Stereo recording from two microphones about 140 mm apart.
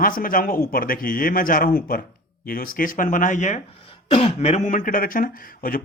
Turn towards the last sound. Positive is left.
turn(degrees=90)